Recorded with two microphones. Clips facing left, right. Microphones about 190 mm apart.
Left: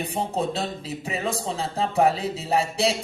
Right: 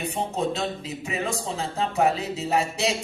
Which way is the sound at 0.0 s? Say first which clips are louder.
Left 1 dB; 35° left (ahead or behind).